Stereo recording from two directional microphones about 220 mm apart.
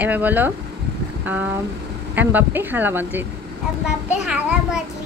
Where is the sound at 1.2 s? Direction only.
10° right (ahead or behind).